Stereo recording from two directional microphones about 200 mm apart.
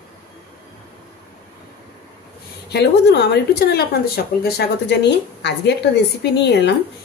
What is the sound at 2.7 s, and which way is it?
Speech, 55° left (ahead or behind).